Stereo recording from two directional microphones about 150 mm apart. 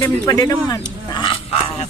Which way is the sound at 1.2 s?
35° left (ahead or behind).